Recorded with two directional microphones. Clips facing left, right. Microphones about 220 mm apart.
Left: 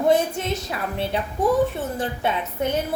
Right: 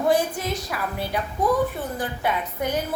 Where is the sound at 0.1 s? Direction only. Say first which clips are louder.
Left 2 dB; 25° left (ahead or behind).